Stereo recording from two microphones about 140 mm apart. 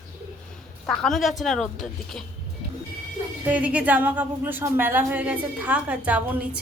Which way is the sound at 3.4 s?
10° right (ahead or behind).